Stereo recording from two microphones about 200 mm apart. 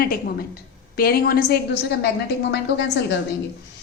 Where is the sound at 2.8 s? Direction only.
60° left (ahead or behind).